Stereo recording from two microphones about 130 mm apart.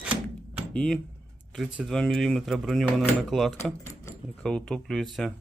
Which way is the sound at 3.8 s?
25° left (ahead or behind).